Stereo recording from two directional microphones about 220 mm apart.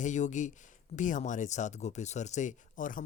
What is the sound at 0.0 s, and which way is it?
Speech, 35° left (ahead or behind).